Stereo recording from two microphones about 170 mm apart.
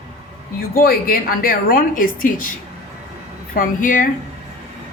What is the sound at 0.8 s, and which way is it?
A woman's voice, 60° left (ahead or behind).